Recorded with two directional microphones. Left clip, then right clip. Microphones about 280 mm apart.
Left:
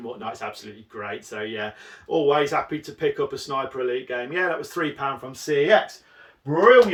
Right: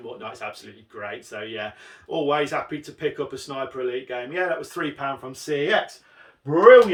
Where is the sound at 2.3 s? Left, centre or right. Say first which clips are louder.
Left 2 dB; centre.